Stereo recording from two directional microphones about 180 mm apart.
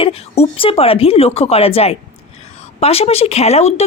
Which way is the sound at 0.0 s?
30° left (ahead or behind).